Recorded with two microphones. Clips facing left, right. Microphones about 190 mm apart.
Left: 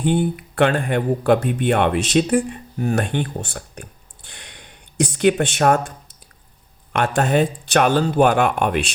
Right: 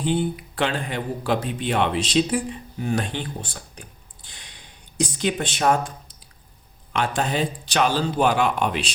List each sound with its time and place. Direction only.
0.0 s speech: 55° left (ahead or behind)
6.9 s speech: 55° left (ahead or behind)